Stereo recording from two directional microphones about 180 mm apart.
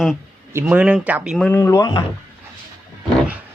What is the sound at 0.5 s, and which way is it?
Speech, 10° right (ahead or behind).